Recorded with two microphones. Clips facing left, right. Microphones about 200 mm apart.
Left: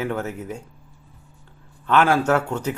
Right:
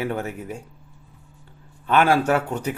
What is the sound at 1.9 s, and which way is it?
Speech, 15° right (ahead or behind).